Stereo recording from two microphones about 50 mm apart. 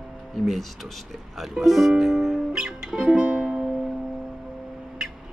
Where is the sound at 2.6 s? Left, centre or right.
Centre.